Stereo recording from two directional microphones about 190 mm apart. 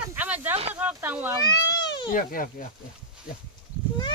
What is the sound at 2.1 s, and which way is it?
Speech, 45° left (ahead or behind).